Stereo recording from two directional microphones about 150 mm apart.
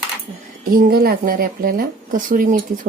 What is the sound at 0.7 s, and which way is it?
Speech, 80° right.